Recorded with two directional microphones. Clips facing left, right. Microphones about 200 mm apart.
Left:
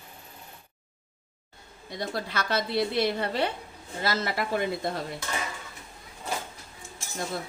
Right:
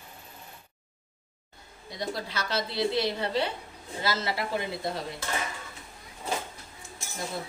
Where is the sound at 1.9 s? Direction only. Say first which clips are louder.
Left 2 dB; 55° left (ahead or behind).